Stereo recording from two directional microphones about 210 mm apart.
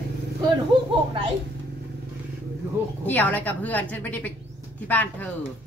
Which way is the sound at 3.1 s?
5° left (ahead or behind).